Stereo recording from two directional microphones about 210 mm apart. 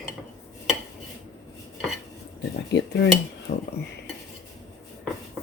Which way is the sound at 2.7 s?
55° left (ahead or behind).